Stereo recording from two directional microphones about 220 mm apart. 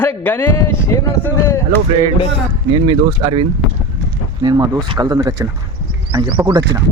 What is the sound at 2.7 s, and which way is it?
Speech, 20° right (ahead or behind).